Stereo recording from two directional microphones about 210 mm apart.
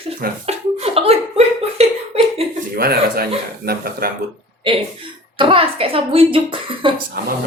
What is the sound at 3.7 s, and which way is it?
Speech, 45° right (ahead or behind).